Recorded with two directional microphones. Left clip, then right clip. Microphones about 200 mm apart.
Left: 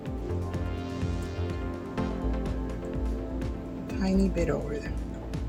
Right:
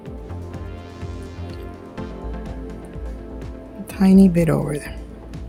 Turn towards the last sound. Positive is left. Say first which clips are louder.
# right 8 dB
turn(degrees=-60)  # may be behind; listen again after turning